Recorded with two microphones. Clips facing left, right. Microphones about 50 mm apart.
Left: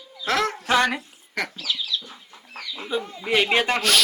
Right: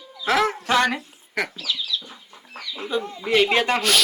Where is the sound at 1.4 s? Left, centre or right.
Centre.